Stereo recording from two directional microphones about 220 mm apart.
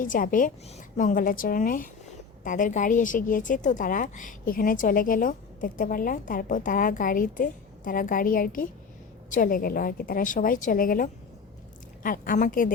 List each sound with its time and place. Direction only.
0.0 s a woman's voice: 35° left (ahead or behind)